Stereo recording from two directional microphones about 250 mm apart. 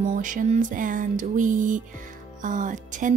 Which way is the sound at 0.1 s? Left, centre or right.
Right.